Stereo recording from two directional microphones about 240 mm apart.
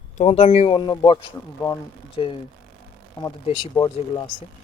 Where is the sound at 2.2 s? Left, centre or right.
Left.